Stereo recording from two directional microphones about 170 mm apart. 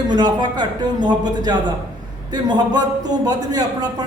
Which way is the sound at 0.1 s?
25° right (ahead or behind).